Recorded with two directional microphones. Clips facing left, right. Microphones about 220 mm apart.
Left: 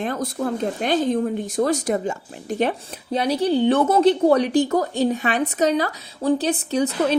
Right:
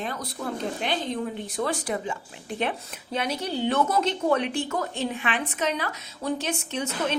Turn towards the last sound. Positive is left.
turn(degrees=35)  # may be behind; listen again after turning